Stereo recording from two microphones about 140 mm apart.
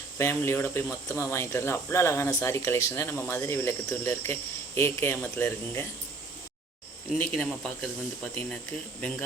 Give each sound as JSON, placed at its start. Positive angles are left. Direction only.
{"t": 0.2, "sound": "speech", "side_deg": 20}
{"t": 7.1, "sound": "speech", "side_deg": 5}